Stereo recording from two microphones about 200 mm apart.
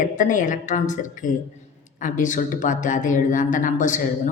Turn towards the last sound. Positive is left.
turn(degrees=40)  # may be behind; listen again after turning